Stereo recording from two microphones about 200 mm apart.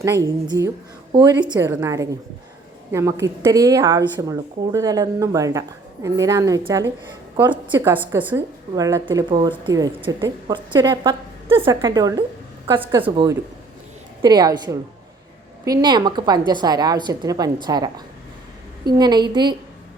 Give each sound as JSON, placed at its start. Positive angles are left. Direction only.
{"t": 0.0, "sound": "a woman's voice", "side_deg": -15}
{"t": 7.7, "sound": "a woman's voice", "side_deg": -10}